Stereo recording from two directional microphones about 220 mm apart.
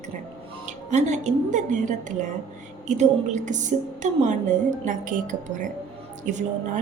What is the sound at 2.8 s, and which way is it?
Speech, 30° right (ahead or behind).